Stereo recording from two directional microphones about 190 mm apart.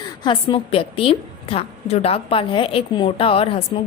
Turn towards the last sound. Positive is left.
turn(degrees=30)  # may be behind; listen again after turning